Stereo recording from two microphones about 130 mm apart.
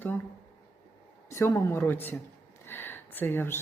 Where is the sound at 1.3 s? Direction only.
20° left (ahead or behind).